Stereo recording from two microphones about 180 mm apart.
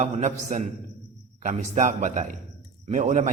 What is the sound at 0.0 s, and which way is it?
A man's voice, 40° right (ahead or behind).